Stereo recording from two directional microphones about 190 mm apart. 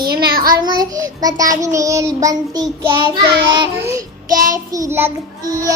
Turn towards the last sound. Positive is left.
turn(degrees=-15)  # may be behind; listen again after turning